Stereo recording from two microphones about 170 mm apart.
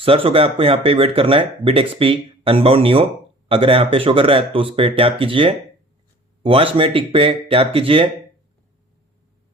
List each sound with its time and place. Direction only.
0.0 s speech: 35° right (ahead or behind)